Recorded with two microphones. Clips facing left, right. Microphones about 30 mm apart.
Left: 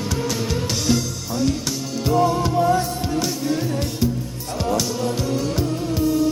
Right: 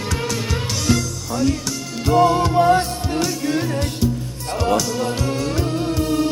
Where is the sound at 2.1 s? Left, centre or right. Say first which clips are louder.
Right 4 dB; right.